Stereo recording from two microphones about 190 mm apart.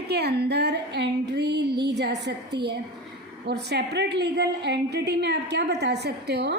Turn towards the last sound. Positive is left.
turn(degrees=-60)  # may be behind; listen again after turning